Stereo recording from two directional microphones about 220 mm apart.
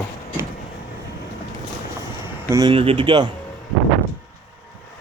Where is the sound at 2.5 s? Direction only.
20° right (ahead or behind).